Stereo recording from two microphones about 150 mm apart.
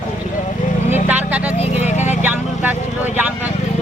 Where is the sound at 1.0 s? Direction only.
10° right (ahead or behind).